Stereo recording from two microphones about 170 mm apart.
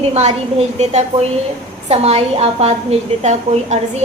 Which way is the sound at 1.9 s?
35° right (ahead or behind).